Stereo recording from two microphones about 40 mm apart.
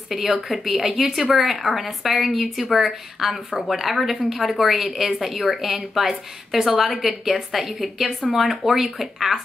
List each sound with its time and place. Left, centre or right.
0.1 s a woman's voice: centre